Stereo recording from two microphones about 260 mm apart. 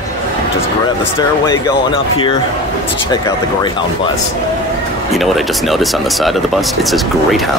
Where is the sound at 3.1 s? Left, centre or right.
Centre.